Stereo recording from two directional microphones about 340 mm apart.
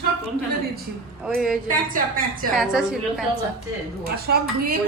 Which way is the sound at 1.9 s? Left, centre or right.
Right.